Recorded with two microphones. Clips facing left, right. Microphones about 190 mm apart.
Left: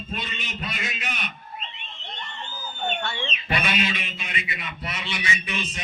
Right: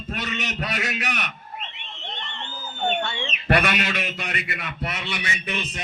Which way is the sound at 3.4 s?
65° right (ahead or behind).